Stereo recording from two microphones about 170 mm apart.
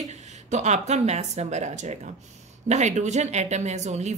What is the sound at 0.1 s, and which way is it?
Speech, 40° right (ahead or behind).